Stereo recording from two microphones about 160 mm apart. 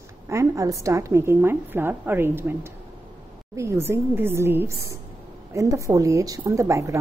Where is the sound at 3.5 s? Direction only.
15° right (ahead or behind).